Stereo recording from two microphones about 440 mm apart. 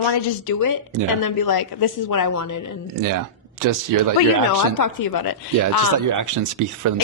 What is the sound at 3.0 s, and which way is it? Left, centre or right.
Speech, right.